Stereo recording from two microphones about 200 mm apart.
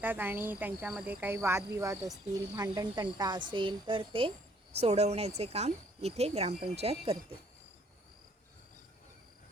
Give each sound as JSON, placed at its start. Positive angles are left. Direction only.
{"t": 0.0, "sound": "speech", "side_deg": -10}